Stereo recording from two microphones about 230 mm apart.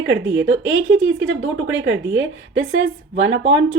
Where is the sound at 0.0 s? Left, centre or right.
Right.